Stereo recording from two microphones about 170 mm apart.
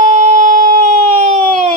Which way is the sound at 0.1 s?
45° right (ahead or behind).